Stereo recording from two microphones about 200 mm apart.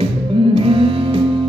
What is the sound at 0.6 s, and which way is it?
Music, 25° right (ahead or behind).